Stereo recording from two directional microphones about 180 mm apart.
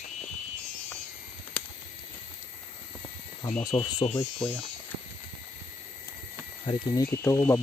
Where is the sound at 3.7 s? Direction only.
35° left (ahead or behind).